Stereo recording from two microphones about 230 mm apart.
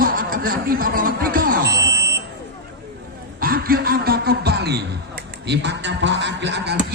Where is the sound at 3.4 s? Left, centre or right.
Right.